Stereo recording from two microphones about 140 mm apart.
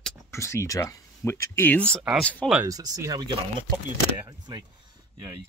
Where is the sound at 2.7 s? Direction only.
25° right (ahead or behind).